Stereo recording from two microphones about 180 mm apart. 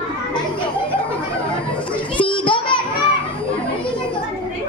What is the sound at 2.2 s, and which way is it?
Children playing, 30° left (ahead or behind).